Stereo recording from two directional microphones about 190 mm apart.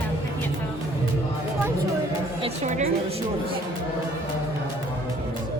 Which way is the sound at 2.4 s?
35° right (ahead or behind).